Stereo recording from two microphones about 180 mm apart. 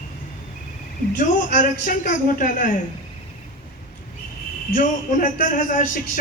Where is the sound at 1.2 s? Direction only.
50° left (ahead or behind).